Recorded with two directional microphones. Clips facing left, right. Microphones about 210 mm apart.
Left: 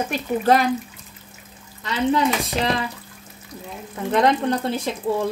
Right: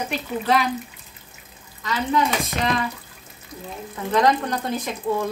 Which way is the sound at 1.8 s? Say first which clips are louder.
Left 2 dB; 30° left (ahead or behind).